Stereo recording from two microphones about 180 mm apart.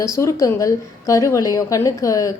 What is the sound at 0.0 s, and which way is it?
A woman's voice, 15° left (ahead or behind).